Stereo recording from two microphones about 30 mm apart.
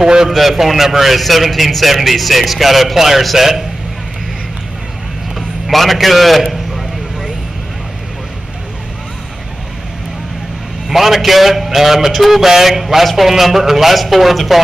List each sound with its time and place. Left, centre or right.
0.0 s a man's voice: right
0.3 s a man's voice: centre
5.7 s a man's voice: centre
10.9 s a man's voice: centre